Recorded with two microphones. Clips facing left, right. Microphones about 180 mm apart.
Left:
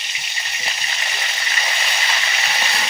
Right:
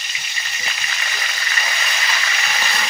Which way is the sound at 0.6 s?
30° left (ahead or behind).